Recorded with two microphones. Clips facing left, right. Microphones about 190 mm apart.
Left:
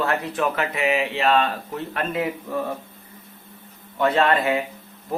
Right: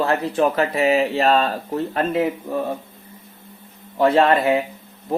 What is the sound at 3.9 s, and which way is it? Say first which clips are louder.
Speech: right 4 dB; 30° right (ahead or behind).